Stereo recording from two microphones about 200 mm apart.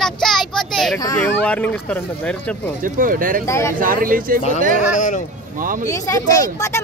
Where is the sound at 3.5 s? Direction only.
15° left (ahead or behind).